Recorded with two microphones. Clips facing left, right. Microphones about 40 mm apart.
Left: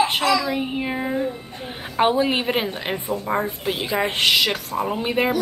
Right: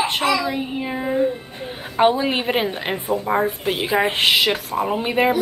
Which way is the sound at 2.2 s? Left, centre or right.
Centre.